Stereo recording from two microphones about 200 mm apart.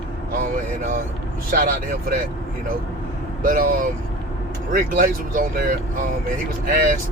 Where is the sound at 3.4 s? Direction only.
45° right (ahead or behind).